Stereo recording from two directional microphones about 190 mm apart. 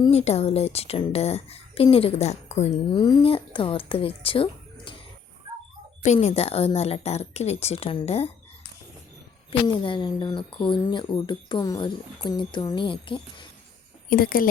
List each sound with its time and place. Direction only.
0.1 s speech: 35° left (ahead or behind)
2.9 s speech: 25° left (ahead or behind)
6.0 s speech: 40° left (ahead or behind)
9.5 s speech: 25° left (ahead or behind)
14.1 s speech: 50° left (ahead or behind)